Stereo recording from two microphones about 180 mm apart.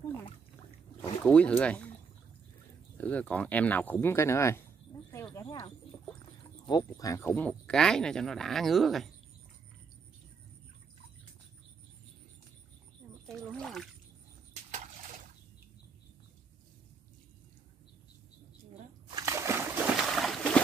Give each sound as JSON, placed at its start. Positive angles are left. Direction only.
{"t": 1.2, "sound": "speech", "side_deg": 5}
{"t": 3.0, "sound": "speech", "side_deg": 10}
{"t": 5.1, "sound": "a sound", "side_deg": 15}
{"t": 6.6, "sound": "speech", "side_deg": 25}
{"t": 13.3, "sound": "speech", "side_deg": 5}
{"t": 19.0, "sound": "a sound", "side_deg": -20}